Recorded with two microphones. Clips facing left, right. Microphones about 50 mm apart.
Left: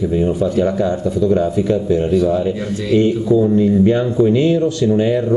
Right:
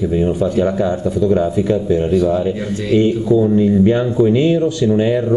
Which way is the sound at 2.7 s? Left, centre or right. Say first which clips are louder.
Even; right.